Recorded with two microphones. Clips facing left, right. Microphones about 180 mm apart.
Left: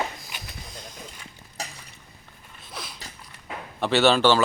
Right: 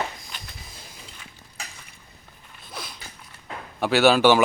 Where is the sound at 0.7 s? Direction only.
5° right (ahead or behind).